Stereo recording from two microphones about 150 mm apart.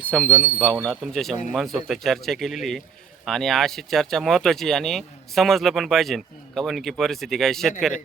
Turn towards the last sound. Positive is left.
turn(degrees=5)  # may be behind; listen again after turning